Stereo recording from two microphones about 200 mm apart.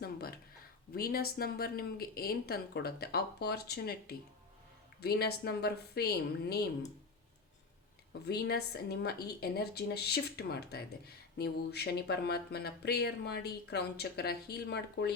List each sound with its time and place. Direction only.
0.0 s speech: 50° left (ahead or behind)
8.3 s speech: 55° left (ahead or behind)